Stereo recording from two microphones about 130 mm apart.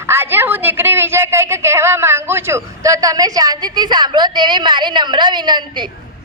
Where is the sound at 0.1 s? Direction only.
15° right (ahead or behind).